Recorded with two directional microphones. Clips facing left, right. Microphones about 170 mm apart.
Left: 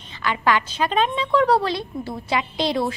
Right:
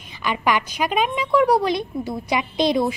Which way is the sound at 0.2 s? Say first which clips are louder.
Even; 15° right (ahead or behind).